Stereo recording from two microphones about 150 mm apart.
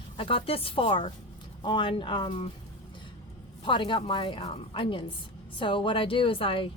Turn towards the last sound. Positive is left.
turn(degrees=35)  # may be behind; listen again after turning